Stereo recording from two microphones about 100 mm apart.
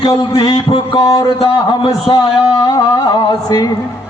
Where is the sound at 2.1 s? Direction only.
40° left (ahead or behind).